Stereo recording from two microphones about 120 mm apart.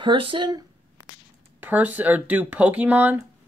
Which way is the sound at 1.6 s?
15° right (ahead or behind).